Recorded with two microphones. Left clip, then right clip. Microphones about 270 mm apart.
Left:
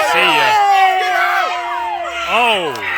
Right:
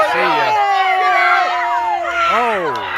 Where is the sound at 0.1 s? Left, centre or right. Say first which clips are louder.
Left 3 dB; left.